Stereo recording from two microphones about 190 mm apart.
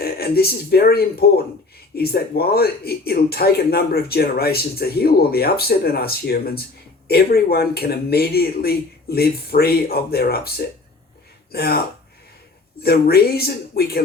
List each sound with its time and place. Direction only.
0.0 s speech: 55° left (ahead or behind)
11.5 s speech: 55° left (ahead or behind)
12.8 s speech: 55° left (ahead or behind)